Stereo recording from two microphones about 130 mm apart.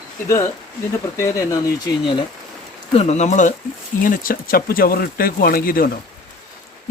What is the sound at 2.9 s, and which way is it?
Speech, 55° left (ahead or behind).